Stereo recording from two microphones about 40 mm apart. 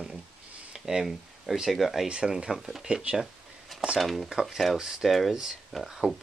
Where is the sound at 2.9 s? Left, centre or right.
Right.